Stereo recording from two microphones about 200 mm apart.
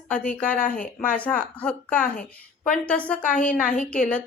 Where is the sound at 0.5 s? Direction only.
45° left (ahead or behind).